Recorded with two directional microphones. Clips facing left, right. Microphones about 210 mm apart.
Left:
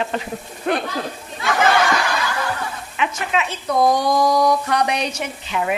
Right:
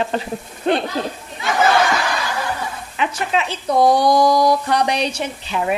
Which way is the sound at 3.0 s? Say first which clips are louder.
Right 1 dB; 35° right (ahead or behind).